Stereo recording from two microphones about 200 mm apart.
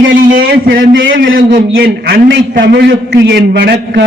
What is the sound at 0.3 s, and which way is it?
A man's voice, 50° right (ahead or behind).